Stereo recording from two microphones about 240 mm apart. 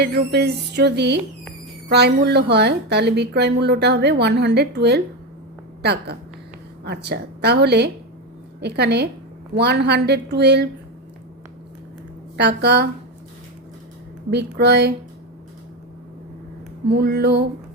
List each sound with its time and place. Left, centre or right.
0.0 s a woman's voice: right
12.4 s a woman's voice: right
14.3 s a woman's voice: right
17.0 s music: right